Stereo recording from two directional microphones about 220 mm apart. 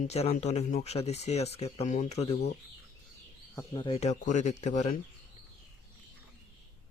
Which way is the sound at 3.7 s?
25° left (ahead or behind).